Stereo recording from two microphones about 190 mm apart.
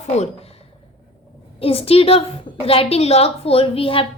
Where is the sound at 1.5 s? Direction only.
30° left (ahead or behind).